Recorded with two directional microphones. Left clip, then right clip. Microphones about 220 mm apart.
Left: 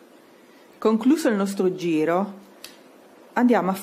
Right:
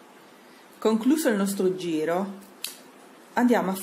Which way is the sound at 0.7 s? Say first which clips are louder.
Left 3 dB; 25° left (ahead or behind).